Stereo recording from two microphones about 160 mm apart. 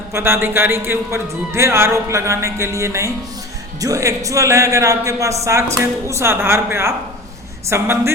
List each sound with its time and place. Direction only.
0.1 s a man's voice: 15° right (ahead or behind)